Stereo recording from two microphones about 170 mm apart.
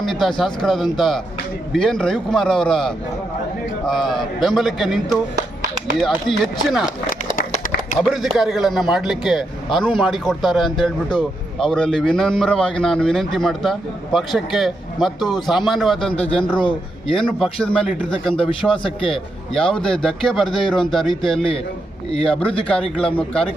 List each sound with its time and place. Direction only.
0.0 s a man's voice: centre (ahead or behind)
6.0 s a man's voice: centre (ahead or behind)
8.0 s a man's voice: centre (ahead or behind)
16.1 s a man's voice: 35° left (ahead or behind)
17.2 s a man's voice: 5° left (ahead or behind)
22.3 s a man's voice: 5° left (ahead or behind)